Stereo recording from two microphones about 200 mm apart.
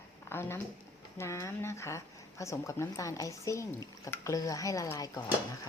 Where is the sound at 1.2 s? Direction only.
15° left (ahead or behind).